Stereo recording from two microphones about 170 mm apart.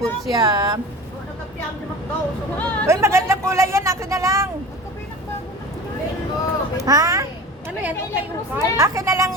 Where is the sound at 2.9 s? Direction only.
15° right (ahead or behind).